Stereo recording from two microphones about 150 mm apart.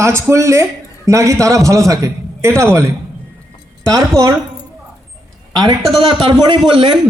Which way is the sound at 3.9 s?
20° right (ahead or behind).